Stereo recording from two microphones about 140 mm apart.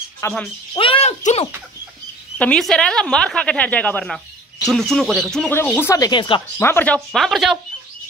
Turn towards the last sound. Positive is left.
turn(degrees=0)  # may be behind; listen again after turning